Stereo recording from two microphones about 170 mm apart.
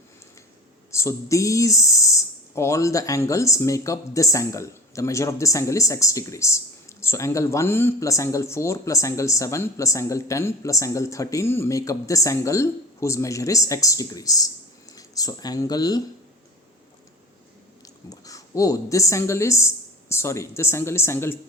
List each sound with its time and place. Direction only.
0.9 s speech: 15° left (ahead or behind)
18.1 s speech: 20° left (ahead or behind)